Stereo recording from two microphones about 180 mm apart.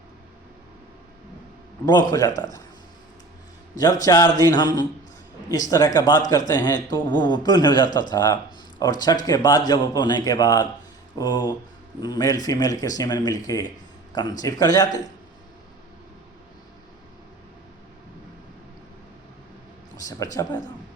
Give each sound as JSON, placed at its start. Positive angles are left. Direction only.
{"t": 1.8, "sound": "speech", "side_deg": 25}
{"t": 4.0, "sound": "speech", "side_deg": 20}
{"t": 20.1, "sound": "speech", "side_deg": 20}